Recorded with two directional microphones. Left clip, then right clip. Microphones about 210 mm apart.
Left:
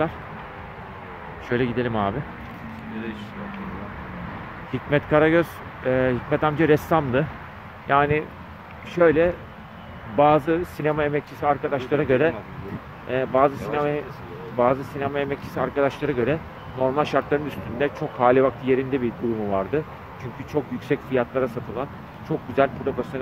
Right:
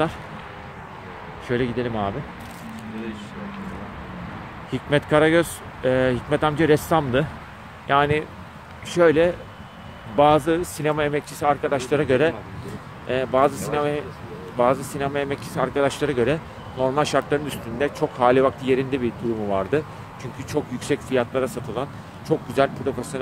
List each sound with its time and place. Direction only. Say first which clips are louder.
1.5 s speech: even; 5° left (ahead or behind)
4.7 s speech: right 1 dB; 10° right (ahead or behind)